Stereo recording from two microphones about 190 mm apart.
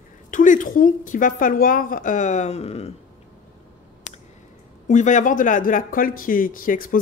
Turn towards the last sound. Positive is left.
turn(degrees=45)  # may be behind; listen again after turning